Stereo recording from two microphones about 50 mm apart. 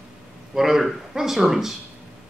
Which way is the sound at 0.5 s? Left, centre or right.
Centre.